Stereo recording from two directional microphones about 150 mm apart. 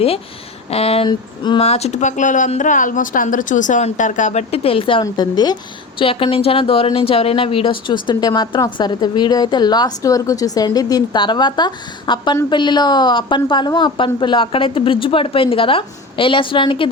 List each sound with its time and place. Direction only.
0.7 s speech: 40° left (ahead or behind)
1.6 s speech: 45° left (ahead or behind)